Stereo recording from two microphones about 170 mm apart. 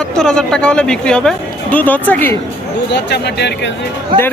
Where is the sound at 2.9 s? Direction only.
80° left.